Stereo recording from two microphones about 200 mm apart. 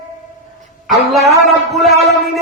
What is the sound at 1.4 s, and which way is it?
Speech, centre (ahead or behind).